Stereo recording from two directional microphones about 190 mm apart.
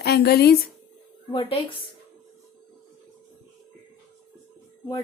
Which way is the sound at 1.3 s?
25° left (ahead or behind).